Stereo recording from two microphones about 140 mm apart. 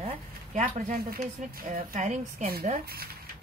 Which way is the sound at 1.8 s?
65° right (ahead or behind).